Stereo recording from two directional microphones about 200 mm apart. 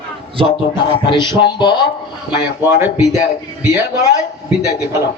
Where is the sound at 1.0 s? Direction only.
20° left (ahead or behind).